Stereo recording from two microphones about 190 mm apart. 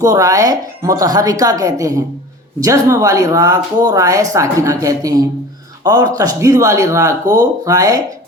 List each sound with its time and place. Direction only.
0.0 s speech: 20° right (ahead or behind)